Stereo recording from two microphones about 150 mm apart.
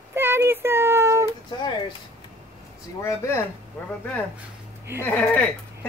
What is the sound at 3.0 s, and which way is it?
Speech, 15° left (ahead or behind).